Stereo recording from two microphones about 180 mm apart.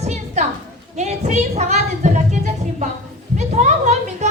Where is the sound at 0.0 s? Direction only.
40° right (ahead or behind).